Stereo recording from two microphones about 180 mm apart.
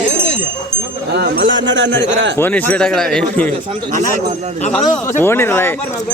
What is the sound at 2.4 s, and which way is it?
Speech, 10° left (ahead or behind).